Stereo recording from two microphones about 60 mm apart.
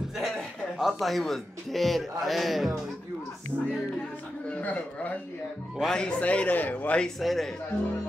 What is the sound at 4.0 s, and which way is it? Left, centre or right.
Music, left.